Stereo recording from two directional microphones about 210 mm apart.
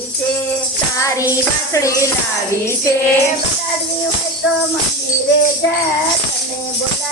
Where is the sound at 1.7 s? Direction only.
15° left (ahead or behind).